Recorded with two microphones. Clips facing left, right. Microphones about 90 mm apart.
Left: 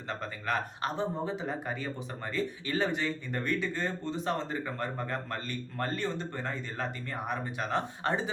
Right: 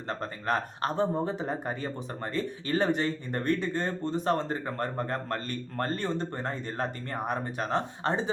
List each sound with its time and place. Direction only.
0.1 s speech: 40° right (ahead or behind)
7.7 s speech: 30° right (ahead or behind)